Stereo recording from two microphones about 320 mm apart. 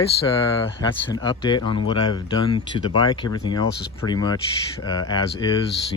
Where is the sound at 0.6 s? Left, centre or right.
Centre.